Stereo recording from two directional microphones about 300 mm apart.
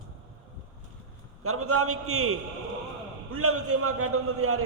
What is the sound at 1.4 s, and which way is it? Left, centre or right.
A man's voice, right.